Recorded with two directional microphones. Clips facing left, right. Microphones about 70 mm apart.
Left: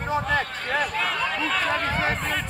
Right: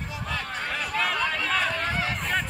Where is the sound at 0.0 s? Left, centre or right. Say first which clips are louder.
Left 9 dB; left.